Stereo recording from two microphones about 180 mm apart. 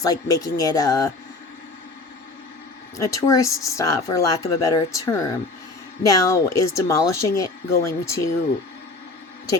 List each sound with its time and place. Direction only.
0.0 s speech: 20° left (ahead or behind)
3.0 s speech: 20° left (ahead or behind)